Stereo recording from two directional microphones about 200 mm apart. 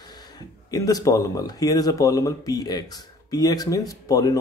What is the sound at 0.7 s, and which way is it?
Speech, 15° left (ahead or behind).